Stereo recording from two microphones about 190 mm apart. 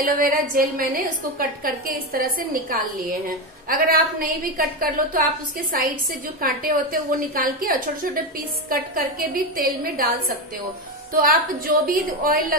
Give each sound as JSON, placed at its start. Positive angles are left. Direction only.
{"t": 0.0, "sound": "a woman's voice", "side_deg": -45}
{"t": 2.1, "sound": "a woman's voice", "side_deg": -50}
{"t": 6.4, "sound": "a woman's voice", "side_deg": -50}
{"t": 11.2, "sound": "a woman's voice", "side_deg": -50}